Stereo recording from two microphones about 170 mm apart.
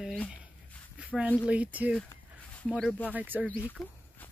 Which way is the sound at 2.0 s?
10° left (ahead or behind).